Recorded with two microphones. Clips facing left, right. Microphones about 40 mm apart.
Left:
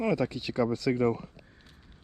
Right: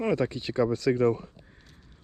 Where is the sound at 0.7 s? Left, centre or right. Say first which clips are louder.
Right 4 dB; right.